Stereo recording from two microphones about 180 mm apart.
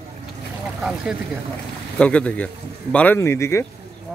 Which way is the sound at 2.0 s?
5° left (ahead or behind).